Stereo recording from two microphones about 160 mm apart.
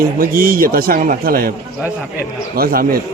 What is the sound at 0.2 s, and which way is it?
A man's voice, 65° right (ahead or behind).